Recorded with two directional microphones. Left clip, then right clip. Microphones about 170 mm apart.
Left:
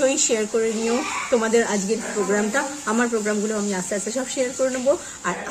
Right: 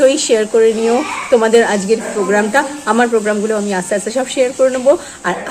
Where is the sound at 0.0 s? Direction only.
20° left (ahead or behind).